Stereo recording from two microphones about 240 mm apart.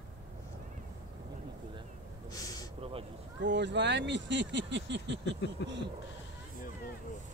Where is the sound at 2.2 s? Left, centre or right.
Centre.